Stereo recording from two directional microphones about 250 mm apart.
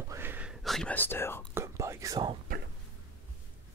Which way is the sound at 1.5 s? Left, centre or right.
Centre.